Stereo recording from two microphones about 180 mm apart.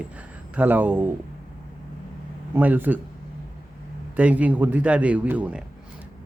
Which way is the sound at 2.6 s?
10° right (ahead or behind).